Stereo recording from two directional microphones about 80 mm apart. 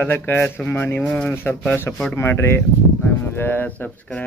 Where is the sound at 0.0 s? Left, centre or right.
Left.